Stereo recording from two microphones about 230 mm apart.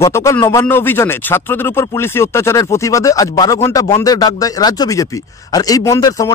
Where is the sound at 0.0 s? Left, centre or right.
Centre.